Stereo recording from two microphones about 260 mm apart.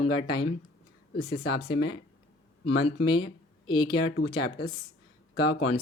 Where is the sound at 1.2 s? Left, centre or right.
Left.